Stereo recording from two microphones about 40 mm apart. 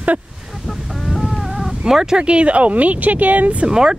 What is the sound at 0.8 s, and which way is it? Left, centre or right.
Chicken, centre.